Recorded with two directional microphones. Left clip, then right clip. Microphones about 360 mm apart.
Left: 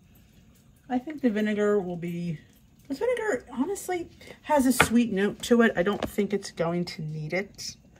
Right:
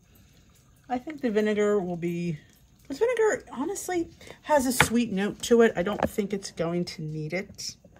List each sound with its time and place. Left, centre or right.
0.8 s speech: centre